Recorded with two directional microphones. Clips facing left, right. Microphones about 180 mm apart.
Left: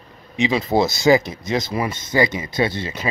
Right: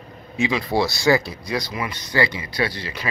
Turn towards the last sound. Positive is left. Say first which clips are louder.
# left 4 dB
turn(degrees=25)  # may be behind; listen again after turning